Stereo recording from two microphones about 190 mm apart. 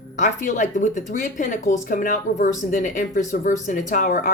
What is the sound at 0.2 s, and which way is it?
A woman's voice, 40° left (ahead or behind).